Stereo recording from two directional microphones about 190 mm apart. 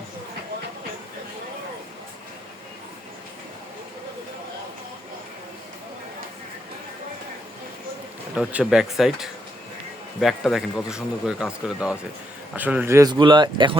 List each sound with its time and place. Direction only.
8.4 s speech: 5° right (ahead or behind); by 13.7 s 25° right (ahead or behind)